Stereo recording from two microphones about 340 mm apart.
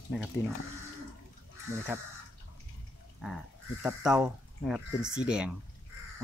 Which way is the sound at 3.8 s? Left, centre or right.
Centre.